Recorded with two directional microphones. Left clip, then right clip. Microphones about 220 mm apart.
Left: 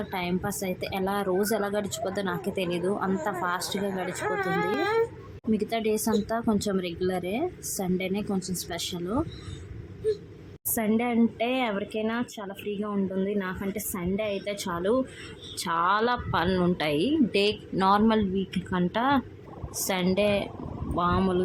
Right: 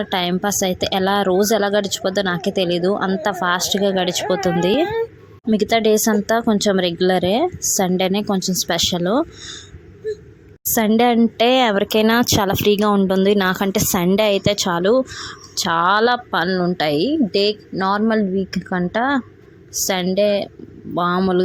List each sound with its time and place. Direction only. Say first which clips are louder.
0.1 s speech: right 12 dB; 30° right (ahead or behind)
5.5 s speech: right 11 dB; 30° right (ahead or behind)
10.8 s a woman's voice: right 11 dB; 35° right (ahead or behind)